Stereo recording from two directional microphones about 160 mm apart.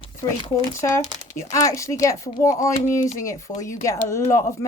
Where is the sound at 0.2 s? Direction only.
20° left (ahead or behind).